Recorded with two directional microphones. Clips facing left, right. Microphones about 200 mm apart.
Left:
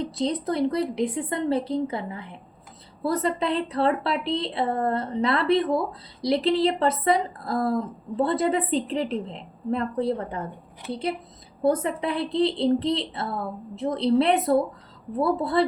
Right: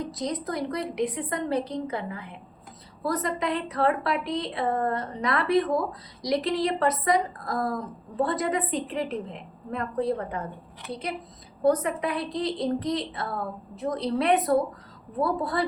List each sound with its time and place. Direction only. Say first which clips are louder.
0.0 s a woman's voice: left 4 dB; 30° left (ahead or behind)
11.6 s a woman's voice: even; 25° left (ahead or behind)